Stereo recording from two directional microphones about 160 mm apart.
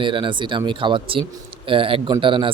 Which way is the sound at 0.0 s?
30° right (ahead or behind).